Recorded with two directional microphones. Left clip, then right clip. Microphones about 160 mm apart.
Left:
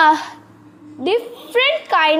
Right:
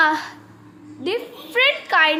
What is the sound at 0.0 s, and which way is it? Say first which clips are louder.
A woman's voice: left 5 dB; 25° left (ahead or behind).